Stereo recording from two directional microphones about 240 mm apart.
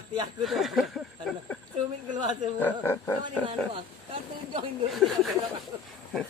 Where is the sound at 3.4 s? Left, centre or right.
Right.